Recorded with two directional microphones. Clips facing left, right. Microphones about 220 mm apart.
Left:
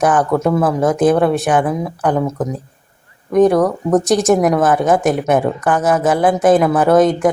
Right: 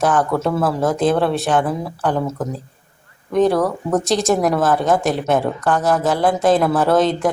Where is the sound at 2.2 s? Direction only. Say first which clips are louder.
Left 4 dB; 15° left (ahead or behind).